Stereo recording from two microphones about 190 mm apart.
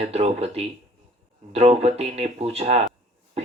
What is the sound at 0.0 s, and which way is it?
Speech, 35° right (ahead or behind).